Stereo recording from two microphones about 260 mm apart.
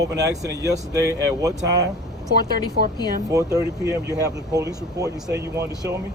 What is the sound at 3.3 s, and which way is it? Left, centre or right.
Speech, centre.